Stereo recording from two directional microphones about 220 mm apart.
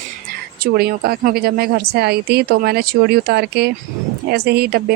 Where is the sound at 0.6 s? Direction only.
45° right (ahead or behind).